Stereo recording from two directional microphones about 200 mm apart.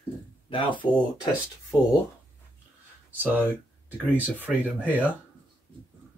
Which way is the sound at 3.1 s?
10° right (ahead or behind).